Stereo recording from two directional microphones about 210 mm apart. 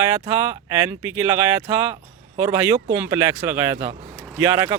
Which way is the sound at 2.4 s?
10° right (ahead or behind).